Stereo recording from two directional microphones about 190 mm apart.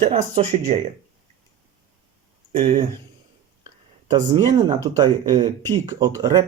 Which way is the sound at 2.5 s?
30° right (ahead or behind).